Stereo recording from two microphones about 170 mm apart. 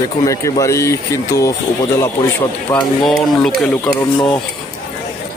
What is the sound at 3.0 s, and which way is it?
Speech, 5° left (ahead or behind).